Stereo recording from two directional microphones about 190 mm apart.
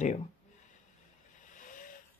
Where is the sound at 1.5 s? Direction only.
45° left (ahead or behind).